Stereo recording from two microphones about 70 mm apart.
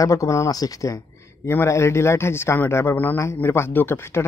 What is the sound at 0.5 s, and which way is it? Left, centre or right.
Speech, left.